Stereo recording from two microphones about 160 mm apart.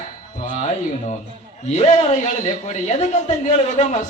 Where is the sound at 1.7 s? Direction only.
50° left (ahead or behind).